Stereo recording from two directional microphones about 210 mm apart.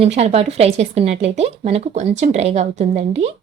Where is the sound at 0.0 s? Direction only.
30° right (ahead or behind).